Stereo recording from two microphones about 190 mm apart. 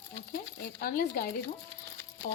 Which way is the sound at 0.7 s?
50° left (ahead or behind).